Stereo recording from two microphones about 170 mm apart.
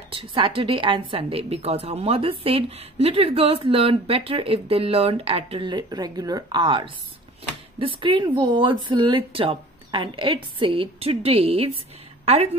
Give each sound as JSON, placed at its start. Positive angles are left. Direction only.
{"t": 0.1, "sound": "a woman's voice", "side_deg": -30}